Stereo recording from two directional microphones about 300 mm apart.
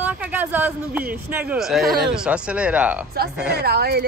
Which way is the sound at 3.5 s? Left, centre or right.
Right.